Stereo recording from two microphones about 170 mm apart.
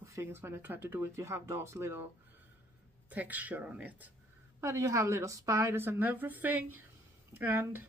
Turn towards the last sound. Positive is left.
turn(degrees=-10)  # may be behind; listen again after turning